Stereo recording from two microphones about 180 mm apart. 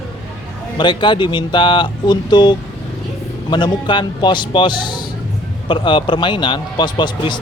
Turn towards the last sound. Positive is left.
turn(degrees=25)  # may be behind; listen again after turning